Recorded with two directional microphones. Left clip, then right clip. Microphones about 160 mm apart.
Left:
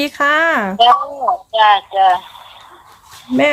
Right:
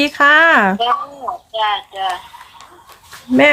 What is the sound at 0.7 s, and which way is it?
Speech, 65° left (ahead or behind).